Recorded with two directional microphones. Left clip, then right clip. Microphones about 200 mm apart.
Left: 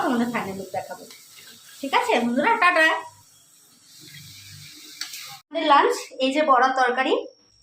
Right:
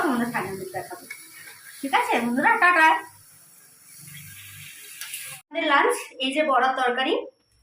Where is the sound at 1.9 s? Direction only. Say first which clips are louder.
Left 1 dB; 60° left (ahead or behind).